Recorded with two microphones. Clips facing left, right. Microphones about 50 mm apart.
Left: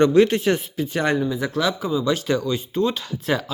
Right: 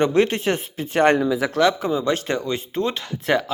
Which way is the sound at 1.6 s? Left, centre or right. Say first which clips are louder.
Right 3 dB; right.